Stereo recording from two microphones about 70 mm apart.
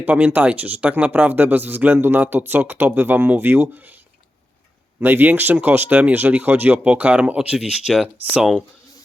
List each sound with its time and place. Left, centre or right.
0.0 s speech: right
4.9 s speech: right; by 8.0 s centre